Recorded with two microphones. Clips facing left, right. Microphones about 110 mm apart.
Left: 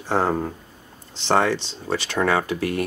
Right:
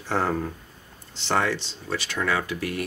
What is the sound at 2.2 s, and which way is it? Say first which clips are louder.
Speech: left 5 dB; 40° left (ahead or behind).